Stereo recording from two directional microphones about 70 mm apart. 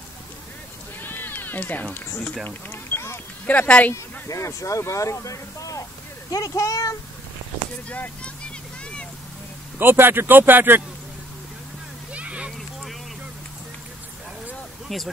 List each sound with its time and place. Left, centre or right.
1.0 s cat: left
2.4 s a sound: left
3.4 s speech: left
3.9 s a child's voice: left
9.8 s speech: right
12.1 s a sound: centre